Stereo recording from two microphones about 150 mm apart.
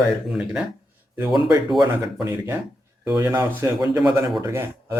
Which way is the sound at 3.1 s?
20° right (ahead or behind).